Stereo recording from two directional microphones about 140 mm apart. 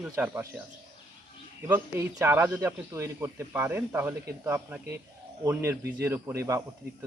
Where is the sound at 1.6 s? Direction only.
20° right (ahead or behind).